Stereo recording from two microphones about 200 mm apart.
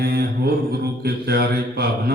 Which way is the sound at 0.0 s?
50° right (ahead or behind).